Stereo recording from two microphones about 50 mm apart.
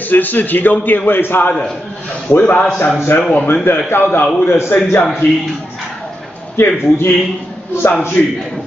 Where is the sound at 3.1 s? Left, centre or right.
Left.